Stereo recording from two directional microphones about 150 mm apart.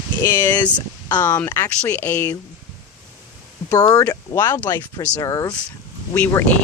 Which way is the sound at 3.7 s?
25° left (ahead or behind).